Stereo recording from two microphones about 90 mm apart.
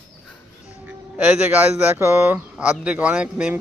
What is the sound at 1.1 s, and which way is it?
Speech, 15° right (ahead or behind).